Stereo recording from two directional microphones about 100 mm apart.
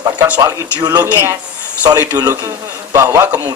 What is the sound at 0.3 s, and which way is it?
Speech, 35° right (ahead or behind).